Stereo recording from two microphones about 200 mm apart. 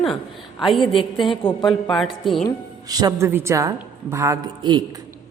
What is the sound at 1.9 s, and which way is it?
Speech, centre (ahead or behind).